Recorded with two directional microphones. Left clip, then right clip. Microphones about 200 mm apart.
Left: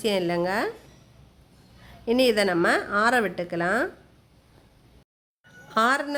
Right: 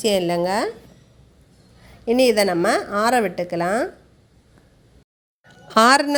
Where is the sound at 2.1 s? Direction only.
15° right (ahead or behind).